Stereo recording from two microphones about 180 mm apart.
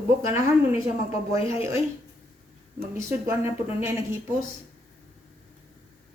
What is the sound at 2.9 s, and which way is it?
Speech, 10° right (ahead or behind).